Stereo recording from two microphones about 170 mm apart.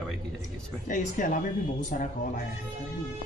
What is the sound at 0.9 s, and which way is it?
Speech, 50° left (ahead or behind).